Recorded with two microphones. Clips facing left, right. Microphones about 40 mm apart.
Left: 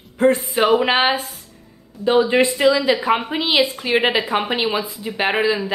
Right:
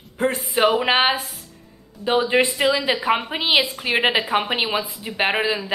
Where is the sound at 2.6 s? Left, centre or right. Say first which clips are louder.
Left 4 dB; centre.